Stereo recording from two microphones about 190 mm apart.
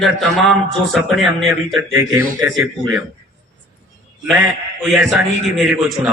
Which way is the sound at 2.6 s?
Centre (ahead or behind).